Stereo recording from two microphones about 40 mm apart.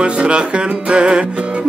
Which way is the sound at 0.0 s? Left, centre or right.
Right.